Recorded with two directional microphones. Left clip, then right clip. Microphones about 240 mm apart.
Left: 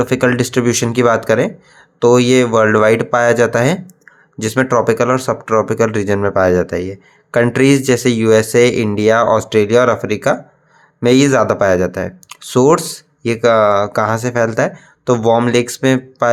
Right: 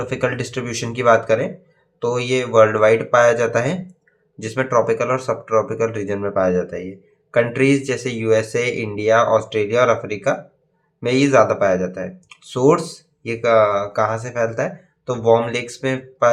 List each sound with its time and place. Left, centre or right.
0.0 s speech: left